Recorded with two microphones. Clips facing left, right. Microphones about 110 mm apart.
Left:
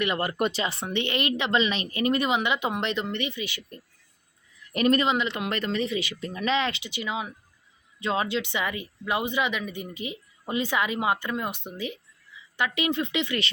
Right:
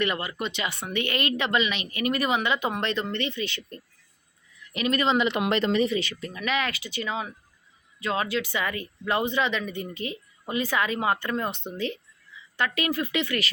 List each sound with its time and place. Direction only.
0.2 s speech: 50° left (ahead or behind)
0.5 s speech: 30° left (ahead or behind); by 3.8 s 10° left (ahead or behind)
4.7 s speech: 45° left (ahead or behind)
5.3 s speech: 20° right (ahead or behind)
6.0 s speech: 20° left (ahead or behind)
7.9 s speech: 25° left (ahead or behind)